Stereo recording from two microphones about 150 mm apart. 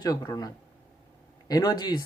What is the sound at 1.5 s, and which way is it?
Speech, 25° left (ahead or behind).